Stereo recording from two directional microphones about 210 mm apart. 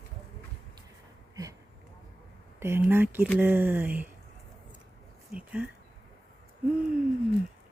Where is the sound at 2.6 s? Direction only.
10° right (ahead or behind).